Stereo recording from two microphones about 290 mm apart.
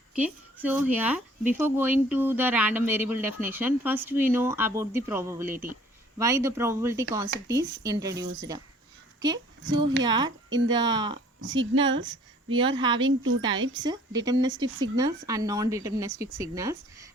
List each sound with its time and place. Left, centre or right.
0.2 s speech: centre
9.6 s speech: right
10.0 s speech: centre
11.4 s speech: right
12.5 s speech: centre
13.1 s a woman's voice: right
13.8 s speech: centre